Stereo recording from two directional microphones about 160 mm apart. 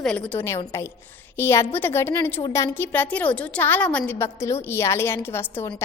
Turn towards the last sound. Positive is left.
turn(degrees=15)  # may be behind; listen again after turning